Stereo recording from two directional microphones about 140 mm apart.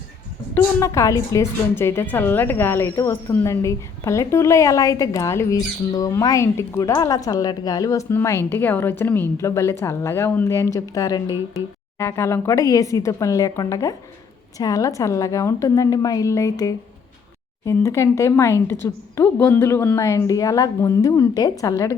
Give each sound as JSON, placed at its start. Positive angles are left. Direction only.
{"t": 0.5, "sound": "a woman's voice", "side_deg": 20}